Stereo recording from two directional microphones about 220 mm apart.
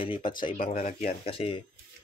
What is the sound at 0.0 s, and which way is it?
Speech, 25° left (ahead or behind).